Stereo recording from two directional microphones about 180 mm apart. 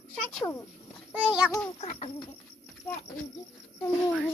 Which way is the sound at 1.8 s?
35° left (ahead or behind).